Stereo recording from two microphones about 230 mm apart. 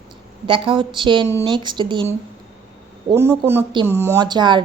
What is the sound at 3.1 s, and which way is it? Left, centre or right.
A woman's voice, centre.